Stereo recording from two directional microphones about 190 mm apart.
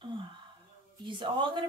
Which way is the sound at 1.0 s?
25° right (ahead or behind).